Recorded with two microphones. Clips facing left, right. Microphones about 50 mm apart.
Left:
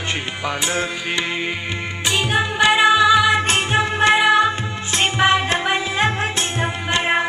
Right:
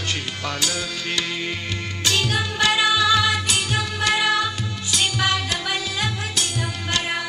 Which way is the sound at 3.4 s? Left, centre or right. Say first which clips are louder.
Left 6 dB; left.